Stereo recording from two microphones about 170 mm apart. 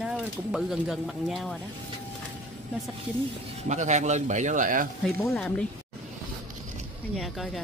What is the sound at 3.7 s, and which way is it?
A man's voice, 45° right (ahead or behind).